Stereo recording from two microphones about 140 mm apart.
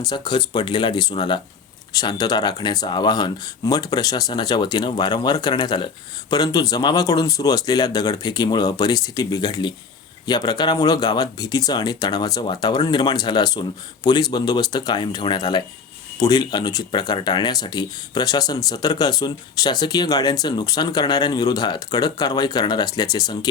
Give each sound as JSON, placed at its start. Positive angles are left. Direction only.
{"t": 0.0, "sound": "speech", "side_deg": 30}